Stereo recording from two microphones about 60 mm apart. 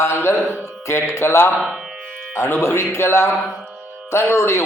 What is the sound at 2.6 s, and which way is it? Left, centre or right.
Speech, left.